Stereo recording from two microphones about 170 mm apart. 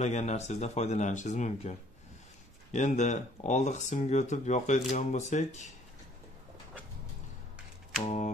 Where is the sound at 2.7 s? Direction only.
45° left (ahead or behind).